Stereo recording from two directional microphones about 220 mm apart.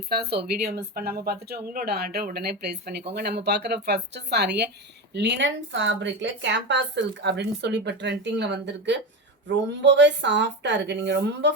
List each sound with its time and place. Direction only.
0.1 s a woman's voice: 45° right (ahead or behind)